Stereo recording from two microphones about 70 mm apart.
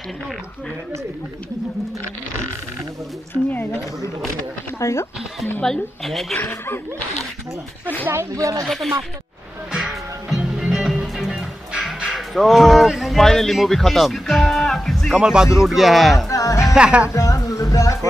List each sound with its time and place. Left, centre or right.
3.3 s a sound: centre
4.7 s speech: left
5.6 s speech: centre
6.5 s speech: left
8.1 s speech: right
8.6 s speech: centre
9.7 s music: centre
12.1 s speech: centre
15.1 s speech: centre
16.3 s music: left
16.7 s speech: centre
17.1 s music: left